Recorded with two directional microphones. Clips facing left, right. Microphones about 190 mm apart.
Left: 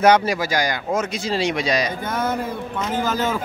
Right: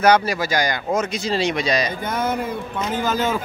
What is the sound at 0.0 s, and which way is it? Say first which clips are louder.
Speech: left 1 dB; 20° left (ahead or behind).